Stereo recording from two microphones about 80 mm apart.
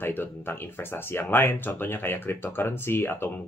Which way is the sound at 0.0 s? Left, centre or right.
Left.